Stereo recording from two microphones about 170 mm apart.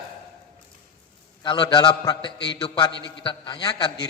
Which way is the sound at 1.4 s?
30° left (ahead or behind).